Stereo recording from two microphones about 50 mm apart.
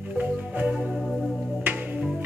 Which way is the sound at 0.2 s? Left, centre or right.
Right.